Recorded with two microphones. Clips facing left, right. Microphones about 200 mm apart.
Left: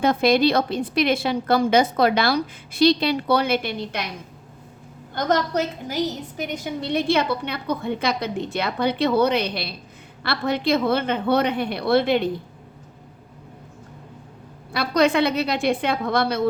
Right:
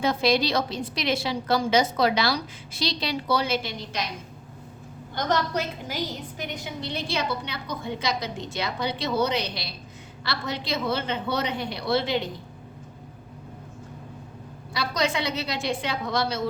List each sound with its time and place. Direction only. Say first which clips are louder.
0.0 s a woman's voice: left 5 dB; 55° left (ahead or behind)
6.5 s a woman's voice: left 9 dB; 55° left (ahead or behind)
14.7 s a woman's voice: left 7 dB; 60° left (ahead or behind)